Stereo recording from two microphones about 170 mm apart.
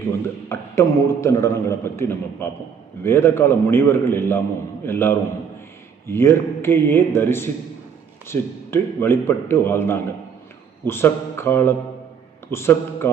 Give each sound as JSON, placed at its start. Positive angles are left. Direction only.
{"t": 0.4, "sound": "a man's voice", "side_deg": 15}